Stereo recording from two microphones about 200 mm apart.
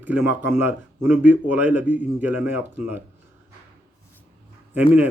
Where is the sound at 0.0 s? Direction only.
10° right (ahead or behind).